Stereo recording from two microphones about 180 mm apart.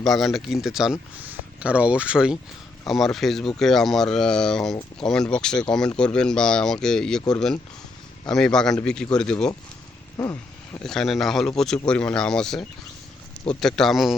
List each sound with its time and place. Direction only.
0.0 s speech: centre (ahead or behind)
10.2 s a sound: 20° left (ahead or behind)
10.8 s speech: centre (ahead or behind)